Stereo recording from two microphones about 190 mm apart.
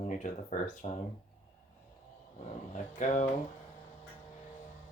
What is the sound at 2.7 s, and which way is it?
Speech, 40° left (ahead or behind).